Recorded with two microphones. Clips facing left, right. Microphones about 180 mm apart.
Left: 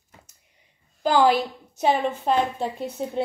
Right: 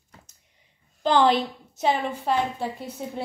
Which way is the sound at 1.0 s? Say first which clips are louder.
Left 1 dB; 10° left (ahead or behind).